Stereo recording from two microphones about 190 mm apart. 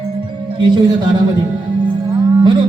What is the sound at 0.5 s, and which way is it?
Music, 25° right (ahead or behind).